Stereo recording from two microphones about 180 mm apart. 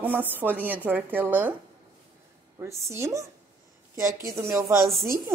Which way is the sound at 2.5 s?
15° right (ahead or behind).